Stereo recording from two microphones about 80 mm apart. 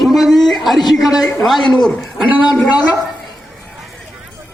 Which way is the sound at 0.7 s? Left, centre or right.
Left.